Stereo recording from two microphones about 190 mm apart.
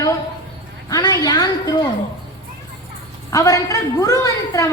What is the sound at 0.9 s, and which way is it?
A woman's voice, 20° left (ahead or behind).